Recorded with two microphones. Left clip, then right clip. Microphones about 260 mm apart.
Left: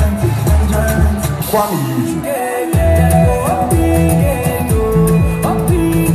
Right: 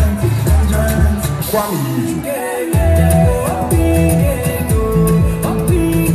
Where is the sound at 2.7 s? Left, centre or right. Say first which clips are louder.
Left 2 dB; left.